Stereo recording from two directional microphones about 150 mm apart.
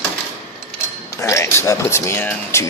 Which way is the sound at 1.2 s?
20° left (ahead or behind).